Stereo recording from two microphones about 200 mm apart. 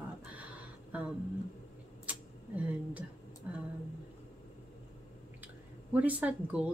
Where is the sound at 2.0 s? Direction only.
5° right (ahead or behind).